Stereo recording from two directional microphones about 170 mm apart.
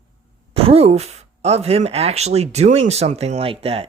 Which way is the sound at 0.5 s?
35° right (ahead or behind).